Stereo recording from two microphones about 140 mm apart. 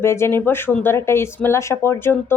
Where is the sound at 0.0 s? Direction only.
20° left (ahead or behind).